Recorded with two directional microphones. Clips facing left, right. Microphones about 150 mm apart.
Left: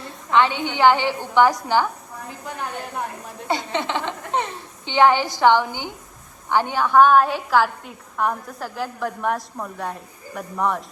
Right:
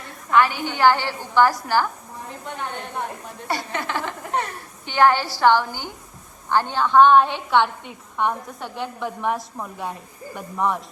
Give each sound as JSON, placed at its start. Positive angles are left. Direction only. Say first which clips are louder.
{"t": 0.3, "sound": "a woman's voice", "louder": "even", "side_deg": 20}
{"t": 2.6, "sound": "a woman's voice", "louder": "left 1 dB", "side_deg": 0}
{"t": 3.4, "sound": "a woman's voice", "louder": "left 3 dB", "side_deg": 20}